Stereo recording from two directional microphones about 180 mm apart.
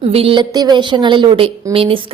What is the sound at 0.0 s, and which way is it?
A woman's voice, 30° right (ahead or behind).